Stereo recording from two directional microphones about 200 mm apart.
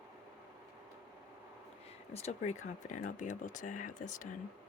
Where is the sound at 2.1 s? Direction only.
35° left (ahead or behind).